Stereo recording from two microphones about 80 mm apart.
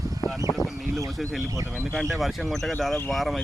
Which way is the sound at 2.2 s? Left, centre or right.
Centre.